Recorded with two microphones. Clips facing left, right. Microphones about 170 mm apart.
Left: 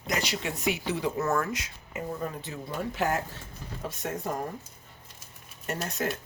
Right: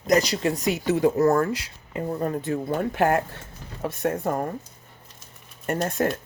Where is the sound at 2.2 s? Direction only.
50° right (ahead or behind).